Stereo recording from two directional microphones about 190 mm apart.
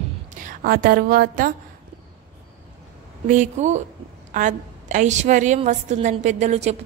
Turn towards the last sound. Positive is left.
turn(degrees=-35)  # may be behind; listen again after turning